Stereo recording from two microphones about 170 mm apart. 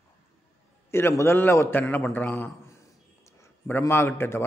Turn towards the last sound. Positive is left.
turn(degrees=15)  # may be behind; listen again after turning